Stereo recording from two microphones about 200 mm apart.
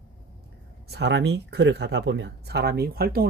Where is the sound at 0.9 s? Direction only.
60° right (ahead or behind).